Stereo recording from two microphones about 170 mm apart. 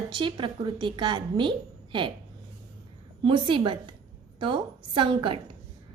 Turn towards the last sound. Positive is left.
turn(degrees=-30)  # may be behind; listen again after turning